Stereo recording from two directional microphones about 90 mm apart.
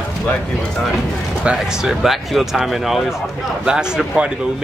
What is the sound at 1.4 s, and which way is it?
Speech, 5° right (ahead or behind).